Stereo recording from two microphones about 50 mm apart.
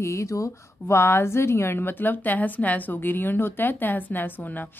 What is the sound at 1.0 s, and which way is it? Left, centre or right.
A woman's voice, left.